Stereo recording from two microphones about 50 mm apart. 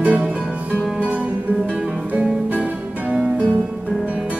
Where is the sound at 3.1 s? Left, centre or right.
Centre.